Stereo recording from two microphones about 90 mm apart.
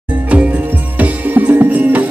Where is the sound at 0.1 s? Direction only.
15° right (ahead or behind).